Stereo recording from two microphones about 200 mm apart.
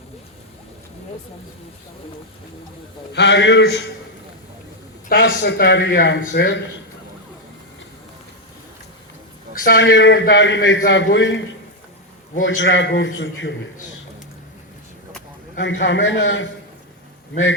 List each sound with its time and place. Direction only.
3.1 s a man's voice: 60° left (ahead or behind)
5.2 s a man's voice: 60° left (ahead or behind)
9.6 s a man's voice: 60° left (ahead or behind)
15.5 s a man's voice: 65° left (ahead or behind)